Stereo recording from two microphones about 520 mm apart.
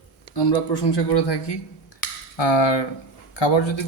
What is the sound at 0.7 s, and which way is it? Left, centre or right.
Speech, left.